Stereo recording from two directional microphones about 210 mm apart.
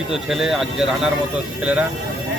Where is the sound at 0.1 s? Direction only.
Centre (ahead or behind).